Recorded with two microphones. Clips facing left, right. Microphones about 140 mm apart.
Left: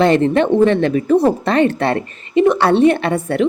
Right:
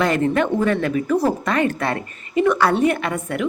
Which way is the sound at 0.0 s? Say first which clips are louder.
Left 6 dB; 30° left (ahead or behind).